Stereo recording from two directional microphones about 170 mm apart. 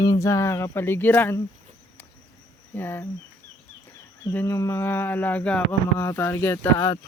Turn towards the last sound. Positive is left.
turn(degrees=15)  # may be behind; listen again after turning